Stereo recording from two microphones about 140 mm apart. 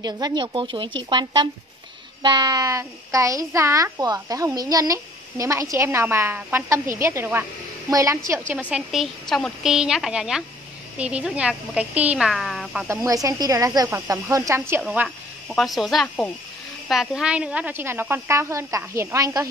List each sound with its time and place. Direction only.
0.0 s a woman's voice: 30° right (ahead or behind)
8.5 s a woman's voice: 5° right (ahead or behind)
12.8 s a woman's voice: 20° right (ahead or behind)
14.8 s a woman's voice: 5° right (ahead or behind); by 19.4 s 25° right (ahead or behind)